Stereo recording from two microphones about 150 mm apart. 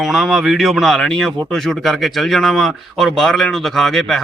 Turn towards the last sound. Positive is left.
turn(degrees=0)  # may be behind; listen again after turning